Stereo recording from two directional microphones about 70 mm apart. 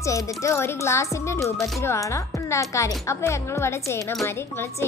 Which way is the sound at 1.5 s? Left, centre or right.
Centre.